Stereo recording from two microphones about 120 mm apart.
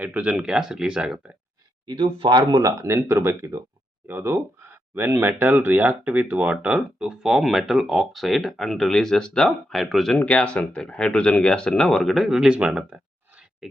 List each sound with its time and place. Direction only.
0.0 s speech: 10° right (ahead or behind)
2.1 s speech: 45° right (ahead or behind)
2.5 s speech: 30° right (ahead or behind); by 13.7 s 10° right (ahead or behind)